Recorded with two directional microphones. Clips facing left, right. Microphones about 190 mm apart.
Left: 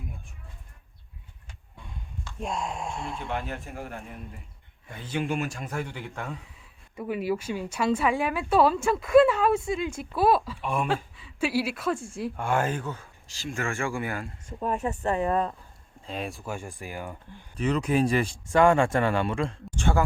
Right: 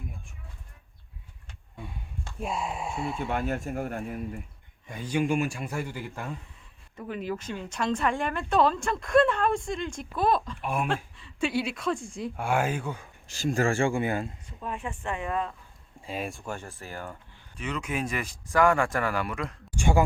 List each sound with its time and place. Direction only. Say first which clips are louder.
2.4 s a woman's voice: even; 5° right (ahead or behind)
3.3 s speech: right 5 dB; 45° right (ahead or behind)
4.0 s a woman's voice: right 8 dB; 5° right (ahead or behind)
6.9 s a woman's voice: left 5 dB; 10° left (ahead or behind)
10.6 s a man's voice: left 1 dB; 5° right (ahead or behind)
10.8 s a woman's voice: left 2 dB; 5° left (ahead or behind)
12.4 s a man's voice: even; 10° right (ahead or behind)
13.2 s speech: right 8 dB; 50° right (ahead or behind)
13.5 s speech: right 5 dB; 35° right (ahead or behind)
14.4 s speech: left 7 dB; 45° left (ahead or behind)
16.0 s a woman's voice: even; 5° right (ahead or behind); by 17.2 s 15° left (ahead or behind)
17.6 s speech: left 8 dB; 35° left (ahead or behind)
19.7 s a sound: right 2 dB; 10° right (ahead or behind)